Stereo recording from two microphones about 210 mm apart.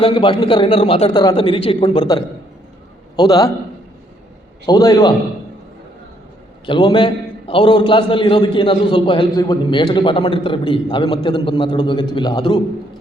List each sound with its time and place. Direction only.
0.0 s a man's voice: 25° left (ahead or behind)
4.6 s a man's voice: 20° left (ahead or behind)
6.7 s a man's voice: 20° left (ahead or behind)